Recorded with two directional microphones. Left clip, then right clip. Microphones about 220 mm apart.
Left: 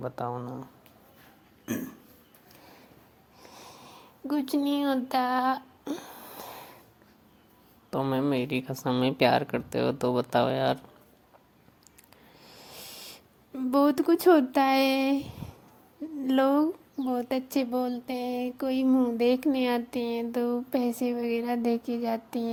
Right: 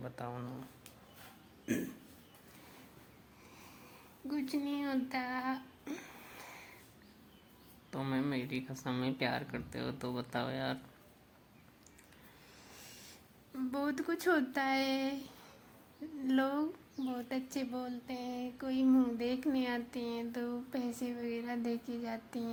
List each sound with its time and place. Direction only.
0.0 s speech: 15° left (ahead or behind)
4.3 s speech: 30° left (ahead or behind)
7.9 s speech: 25° left (ahead or behind)
13.6 s speech: 35° left (ahead or behind)
19.1 s speech: 35° left (ahead or behind)